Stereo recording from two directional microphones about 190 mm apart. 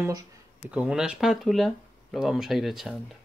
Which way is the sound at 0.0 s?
20° right (ahead or behind).